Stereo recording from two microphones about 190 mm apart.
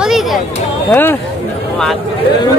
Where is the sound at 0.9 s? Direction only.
10° left (ahead or behind).